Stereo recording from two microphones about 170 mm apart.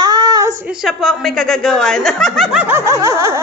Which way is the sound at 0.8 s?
Centre (ahead or behind).